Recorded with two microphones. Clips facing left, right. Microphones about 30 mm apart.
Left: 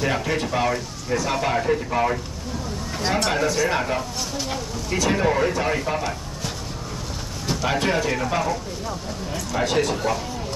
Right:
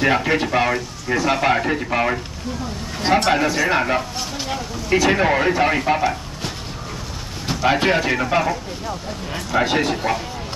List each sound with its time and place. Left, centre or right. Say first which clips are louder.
0.0 s speech: right 5 dB; right
7.4 s speech: right 5 dB; right